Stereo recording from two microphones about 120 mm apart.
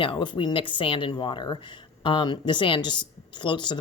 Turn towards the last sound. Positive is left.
turn(degrees=40)  # may be behind; listen again after turning